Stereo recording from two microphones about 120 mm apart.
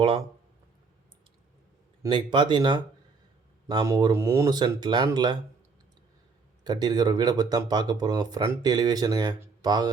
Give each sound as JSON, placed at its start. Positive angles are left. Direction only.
{"t": 2.0, "sound": "speech", "side_deg": -40}
{"t": 3.8, "sound": "speech", "side_deg": -30}
{"t": 4.5, "sound": "speech", "side_deg": -35}
{"t": 6.7, "sound": "speech", "side_deg": -35}